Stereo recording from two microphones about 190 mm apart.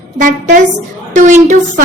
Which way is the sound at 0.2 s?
45° right (ahead or behind).